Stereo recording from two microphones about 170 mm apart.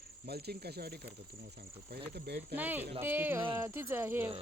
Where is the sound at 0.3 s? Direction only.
70° right (ahead or behind).